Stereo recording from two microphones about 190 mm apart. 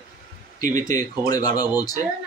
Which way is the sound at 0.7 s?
20° left (ahead or behind).